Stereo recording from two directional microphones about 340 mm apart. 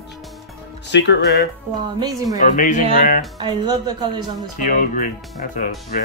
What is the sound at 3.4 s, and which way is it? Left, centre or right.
Speech, centre.